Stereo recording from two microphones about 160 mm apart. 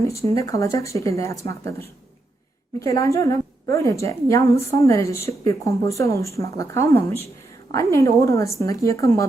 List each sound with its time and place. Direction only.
0.3 s a woman's voice: 20° left (ahead or behind)